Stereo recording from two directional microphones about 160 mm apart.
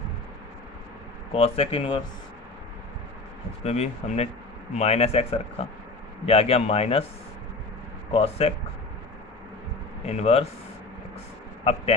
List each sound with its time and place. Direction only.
1.3 s speech: 40° left (ahead or behind)
3.6 s speech: 40° left (ahead or behind)
8.1 s speech: 40° left (ahead or behind)
10.1 s speech: 40° left (ahead or behind)
11.6 s speech: 40° left (ahead or behind)